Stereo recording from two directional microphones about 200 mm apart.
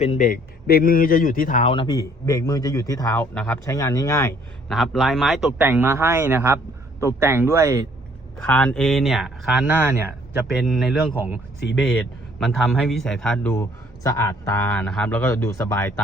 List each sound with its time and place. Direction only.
0.0 s a man's voice: 35° left (ahead or behind)
1.6 s a man's voice: 25° left (ahead or behind)
4.7 s a man's voice: centre (ahead or behind); by 7.9 s 15° right (ahead or behind)
8.4 s a man's voice: 5° left (ahead or behind)
11.8 s a man's voice: 5° left (ahead or behind)